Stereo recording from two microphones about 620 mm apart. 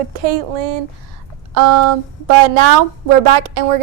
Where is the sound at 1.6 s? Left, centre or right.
Left.